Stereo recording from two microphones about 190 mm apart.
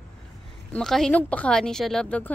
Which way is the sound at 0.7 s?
5° left (ahead or behind).